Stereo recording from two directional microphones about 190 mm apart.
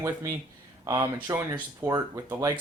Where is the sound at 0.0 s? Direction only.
15° right (ahead or behind).